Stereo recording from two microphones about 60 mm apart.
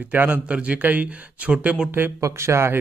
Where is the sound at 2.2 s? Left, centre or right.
Right.